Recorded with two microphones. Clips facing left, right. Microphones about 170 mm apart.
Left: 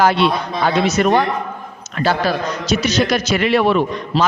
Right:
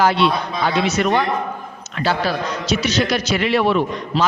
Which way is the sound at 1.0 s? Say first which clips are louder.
Left 3 dB; 40° left (ahead or behind).